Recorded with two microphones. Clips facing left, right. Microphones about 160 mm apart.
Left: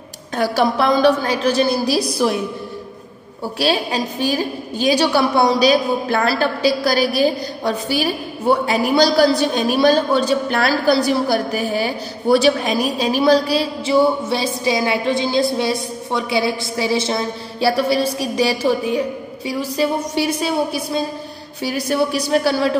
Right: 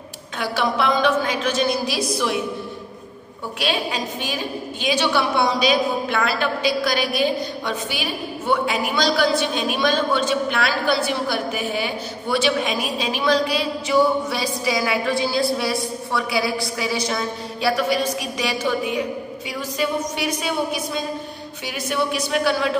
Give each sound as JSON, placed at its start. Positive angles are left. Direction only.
{"t": 0.4, "sound": "a woman's voice", "side_deg": 40}
{"t": 3.5, "sound": "a woman's voice", "side_deg": 35}